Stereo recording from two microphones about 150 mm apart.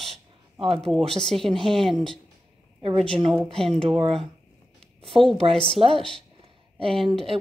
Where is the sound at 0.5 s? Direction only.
40° right (ahead or behind).